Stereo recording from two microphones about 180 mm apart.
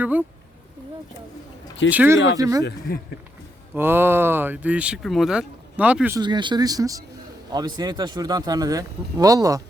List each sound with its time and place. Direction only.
0.0 s speech: 10° right (ahead or behind)
1.9 s speech: 10° right (ahead or behind)
2.4 s speech: 20° right (ahead or behind)
3.8 s speech: 10° right (ahead or behind)
6.1 s speech: 25° right (ahead or behind)